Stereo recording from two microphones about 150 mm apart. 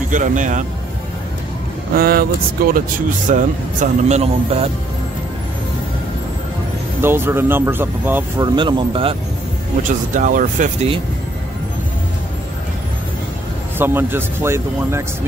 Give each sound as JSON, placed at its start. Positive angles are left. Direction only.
{"t": 0.1, "sound": "speech", "side_deg": -60}
{"t": 2.0, "sound": "speech", "side_deg": -80}
{"t": 3.3, "sound": "speech", "side_deg": -55}
{"t": 7.0, "sound": "speech", "side_deg": -15}
{"t": 8.4, "sound": "speech", "side_deg": -30}
{"t": 9.8, "sound": "speech", "side_deg": -60}
{"t": 13.7, "sound": "speech", "side_deg": -15}